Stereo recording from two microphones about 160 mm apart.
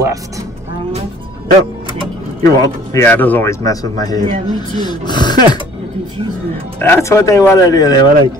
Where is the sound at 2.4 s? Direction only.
20° left (ahead or behind).